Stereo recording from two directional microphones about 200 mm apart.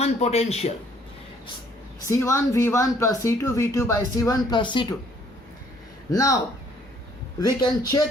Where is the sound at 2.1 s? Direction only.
15° left (ahead or behind).